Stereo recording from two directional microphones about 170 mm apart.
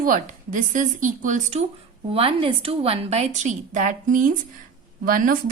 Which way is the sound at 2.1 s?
30° right (ahead or behind).